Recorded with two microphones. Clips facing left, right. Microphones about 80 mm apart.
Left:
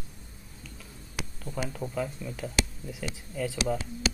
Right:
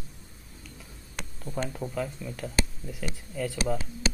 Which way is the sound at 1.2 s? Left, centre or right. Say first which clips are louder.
Right 1 dB; centre.